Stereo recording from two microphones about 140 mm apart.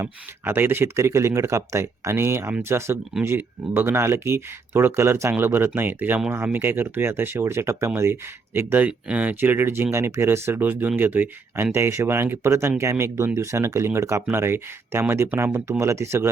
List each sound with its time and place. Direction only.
0.0 s speech: 15° right (ahead or behind)